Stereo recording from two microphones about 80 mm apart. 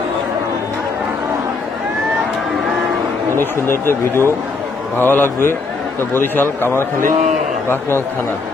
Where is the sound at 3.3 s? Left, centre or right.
Left.